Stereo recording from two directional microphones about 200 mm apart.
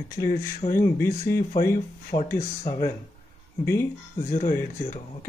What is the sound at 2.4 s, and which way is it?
Speech, 30° left (ahead or behind).